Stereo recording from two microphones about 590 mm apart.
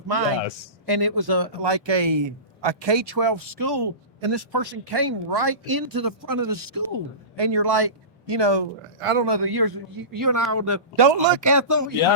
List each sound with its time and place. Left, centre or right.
0.9 s speech: right
9.0 s a man's voice: right
9.2 s a man's voice: right
10.9 s speech: right
11.3 s a man's voice: right